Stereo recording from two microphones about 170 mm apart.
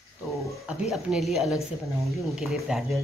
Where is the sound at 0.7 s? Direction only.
5° right (ahead or behind).